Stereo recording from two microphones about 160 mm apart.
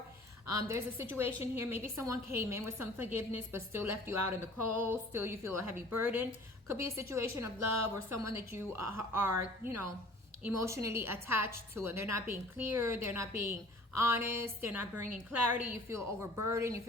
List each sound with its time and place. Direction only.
0.5 s a woman's voice: 15° right (ahead or behind)